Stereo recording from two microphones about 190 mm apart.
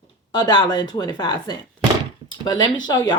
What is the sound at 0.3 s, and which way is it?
Speech, 20° left (ahead or behind).